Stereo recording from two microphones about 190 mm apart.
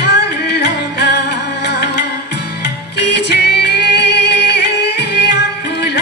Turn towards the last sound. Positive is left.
turn(degrees=65)  # may be behind; listen again after turning